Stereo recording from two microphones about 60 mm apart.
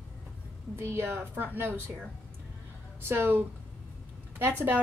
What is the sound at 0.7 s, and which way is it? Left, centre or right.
A woman's voice, right.